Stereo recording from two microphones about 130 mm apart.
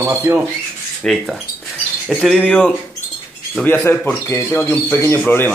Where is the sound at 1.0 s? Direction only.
Centre (ahead or behind).